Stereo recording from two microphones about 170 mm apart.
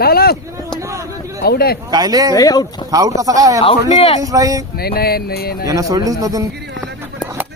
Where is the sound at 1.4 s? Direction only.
65° left (ahead or behind).